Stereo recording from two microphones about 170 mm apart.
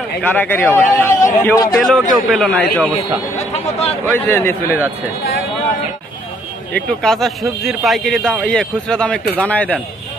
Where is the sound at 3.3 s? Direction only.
40° left (ahead or behind).